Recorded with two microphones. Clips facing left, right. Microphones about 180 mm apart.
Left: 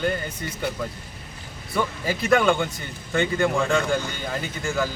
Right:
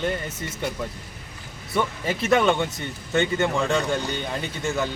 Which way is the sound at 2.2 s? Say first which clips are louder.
Even; 25° right (ahead or behind).